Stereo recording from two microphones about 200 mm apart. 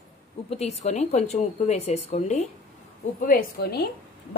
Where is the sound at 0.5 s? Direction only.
30° left (ahead or behind).